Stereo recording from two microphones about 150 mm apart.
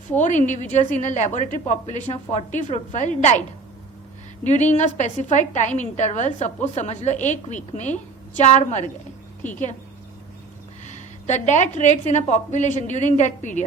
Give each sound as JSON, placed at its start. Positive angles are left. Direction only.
{"t": 0.2, "sound": "a woman's voice", "side_deg": 55}
{"t": 4.4, "sound": "a woman's voice", "side_deg": 50}
{"t": 11.3, "sound": "a woman's voice", "side_deg": 50}